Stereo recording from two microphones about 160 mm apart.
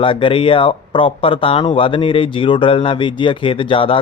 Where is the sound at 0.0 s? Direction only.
30° left (ahead or behind).